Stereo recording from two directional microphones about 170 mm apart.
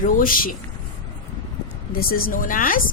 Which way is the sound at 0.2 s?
55° left (ahead or behind).